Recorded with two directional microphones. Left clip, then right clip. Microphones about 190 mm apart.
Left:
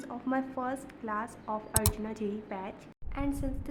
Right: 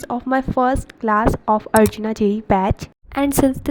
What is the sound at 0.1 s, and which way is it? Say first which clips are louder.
A woman's voice: right 14 dB; 40° right (ahead or behind).